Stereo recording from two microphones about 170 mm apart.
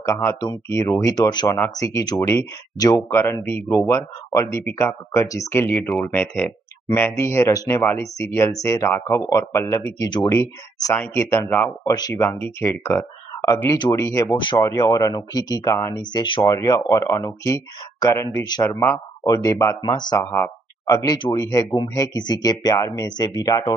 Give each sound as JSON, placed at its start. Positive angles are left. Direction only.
{"t": 0.0, "sound": "speech", "side_deg": 15}